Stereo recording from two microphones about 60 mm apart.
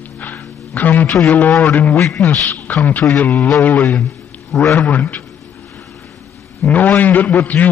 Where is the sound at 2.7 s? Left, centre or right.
Left.